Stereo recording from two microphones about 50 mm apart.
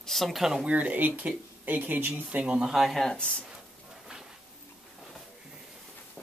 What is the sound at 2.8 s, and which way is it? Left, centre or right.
Speech, centre.